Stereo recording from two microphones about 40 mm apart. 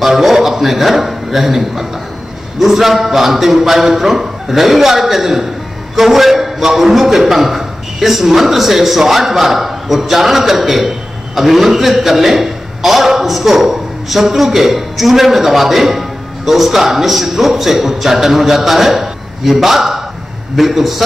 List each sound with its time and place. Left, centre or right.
0.0 s a man's voice: centre